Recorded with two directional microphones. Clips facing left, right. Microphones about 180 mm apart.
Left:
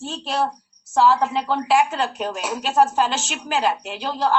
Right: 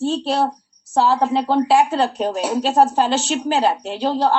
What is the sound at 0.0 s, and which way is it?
A woman's voice, 35° right (ahead or behind).